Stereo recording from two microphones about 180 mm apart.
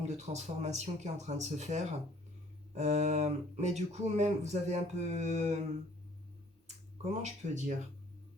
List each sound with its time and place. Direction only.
0.1 s speech: 40° right (ahead or behind)
6.7 s speech: 40° right (ahead or behind)